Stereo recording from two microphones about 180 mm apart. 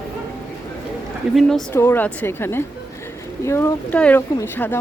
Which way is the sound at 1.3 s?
Centre (ahead or behind).